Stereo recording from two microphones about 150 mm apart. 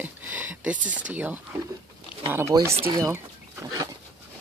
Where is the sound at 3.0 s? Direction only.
20° right (ahead or behind).